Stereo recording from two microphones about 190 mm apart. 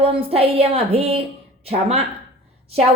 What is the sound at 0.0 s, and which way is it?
A woman's voice, 30° right (ahead or behind).